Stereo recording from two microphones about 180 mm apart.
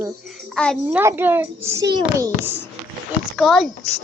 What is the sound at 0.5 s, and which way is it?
Speech, 5° left (ahead or behind).